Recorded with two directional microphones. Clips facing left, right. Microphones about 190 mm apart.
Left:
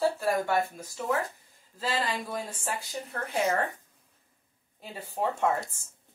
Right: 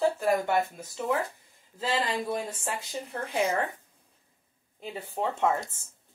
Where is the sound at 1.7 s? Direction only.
20° right (ahead or behind).